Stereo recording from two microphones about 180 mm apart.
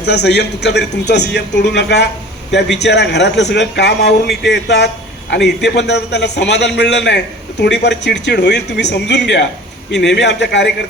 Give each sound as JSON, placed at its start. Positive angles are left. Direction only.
{"t": 0.0, "sound": "a man's voice", "side_deg": 70}